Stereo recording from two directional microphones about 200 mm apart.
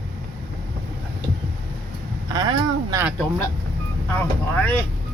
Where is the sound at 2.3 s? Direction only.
20° right (ahead or behind).